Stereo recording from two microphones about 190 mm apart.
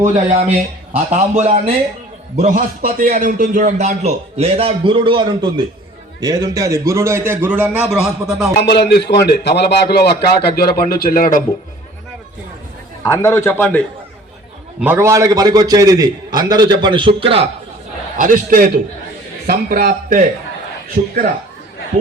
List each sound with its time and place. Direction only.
0.0 s a man's voice: 30° right (ahead or behind)
2.8 s a man's voice: 50° right (ahead or behind); by 8.4 s 5° right (ahead or behind)
8.8 s a man's voice: 60° left (ahead or behind)
13.0 s a man's voice: 15° left (ahead or behind)
14.8 s a man's voice: 10° right (ahead or behind); by 17.5 s 30° right (ahead or behind)
18.2 s speech: 45° right (ahead or behind)